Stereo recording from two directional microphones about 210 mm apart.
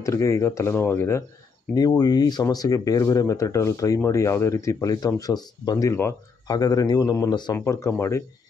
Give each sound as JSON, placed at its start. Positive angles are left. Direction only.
{"t": 0.0, "sound": "speech", "side_deg": 15}